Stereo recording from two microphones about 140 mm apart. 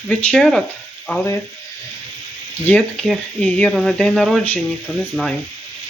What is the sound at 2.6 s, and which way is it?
Speech, 10° left (ahead or behind).